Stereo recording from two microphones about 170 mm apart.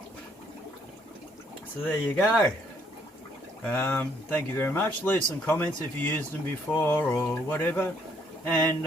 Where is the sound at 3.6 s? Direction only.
10° left (ahead or behind).